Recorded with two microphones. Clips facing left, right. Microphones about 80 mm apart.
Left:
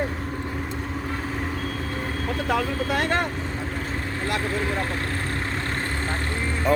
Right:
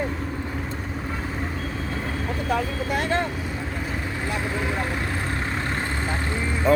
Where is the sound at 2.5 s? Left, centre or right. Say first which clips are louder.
Left 1 dB; left.